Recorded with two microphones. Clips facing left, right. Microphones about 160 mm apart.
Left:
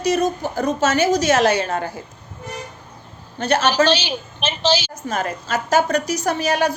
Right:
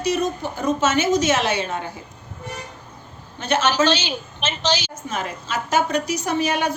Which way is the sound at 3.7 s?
15° left (ahead or behind).